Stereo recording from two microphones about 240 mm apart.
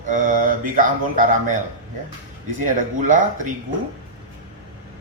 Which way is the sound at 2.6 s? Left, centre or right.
Right.